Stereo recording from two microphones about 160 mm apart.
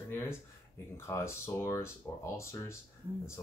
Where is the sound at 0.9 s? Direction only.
15° left (ahead or behind).